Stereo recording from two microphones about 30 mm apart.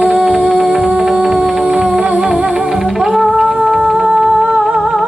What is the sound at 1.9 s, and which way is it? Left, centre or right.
Music, right.